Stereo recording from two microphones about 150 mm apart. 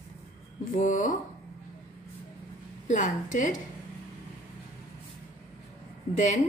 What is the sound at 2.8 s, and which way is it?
Speech, 55° left (ahead or behind).